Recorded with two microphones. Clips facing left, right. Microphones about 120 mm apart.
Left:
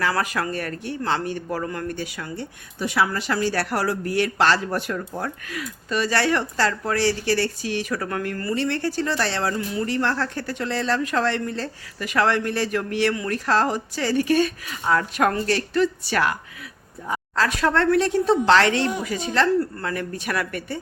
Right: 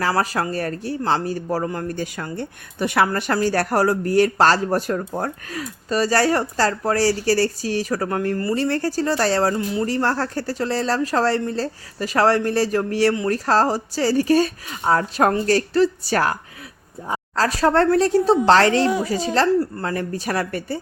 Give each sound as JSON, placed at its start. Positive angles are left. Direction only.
{"t": 0.0, "sound": "speech", "side_deg": -35}
{"t": 2.0, "sound": "speech", "side_deg": -45}